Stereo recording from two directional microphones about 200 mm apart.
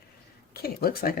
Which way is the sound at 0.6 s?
50° left (ahead or behind).